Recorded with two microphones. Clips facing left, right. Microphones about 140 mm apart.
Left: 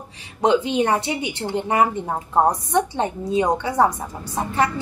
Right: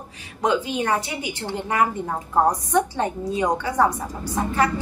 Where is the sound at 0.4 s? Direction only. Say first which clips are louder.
Left 4 dB; 25° left (ahead or behind).